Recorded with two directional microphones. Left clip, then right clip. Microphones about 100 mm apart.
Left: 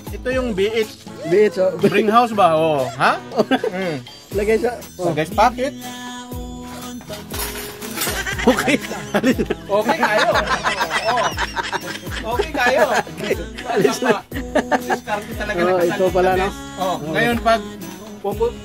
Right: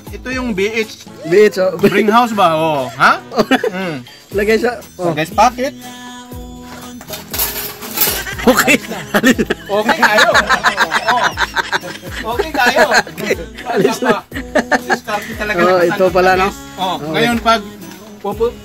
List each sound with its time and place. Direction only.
0.2 s speech: 55° left (ahead or behind)
1.2 s speech: centre (ahead or behind)
2.0 s speech: 40° left (ahead or behind)
3.3 s speech: centre (ahead or behind)
3.7 s speech: 50° left (ahead or behind)
4.4 s speech: centre (ahead or behind)
5.1 s speech: 40° left (ahead or behind)
5.4 s speech: 20° left (ahead or behind)
8.2 s speech: centre (ahead or behind)
17.1 s a man's voice: 90° left